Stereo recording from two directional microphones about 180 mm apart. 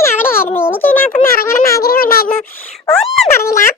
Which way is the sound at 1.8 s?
55° left (ahead or behind).